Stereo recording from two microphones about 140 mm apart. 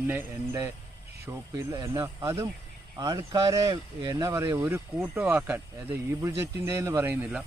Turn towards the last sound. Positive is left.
turn(degrees=-10)  # may be behind; listen again after turning